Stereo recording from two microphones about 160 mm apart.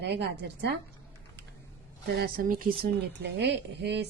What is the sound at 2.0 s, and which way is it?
Speech, 85° right.